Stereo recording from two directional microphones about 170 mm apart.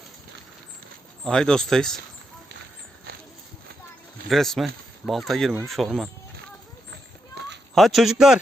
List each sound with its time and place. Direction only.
1.2 s speech: 5° left (ahead or behind)
4.3 s speech: centre (ahead or behind)
6.9 s a sound: 90° right
7.8 s speech: centre (ahead or behind)